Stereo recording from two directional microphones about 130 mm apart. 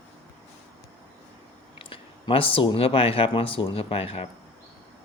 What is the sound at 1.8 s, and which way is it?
Speech, 45° left (ahead or behind).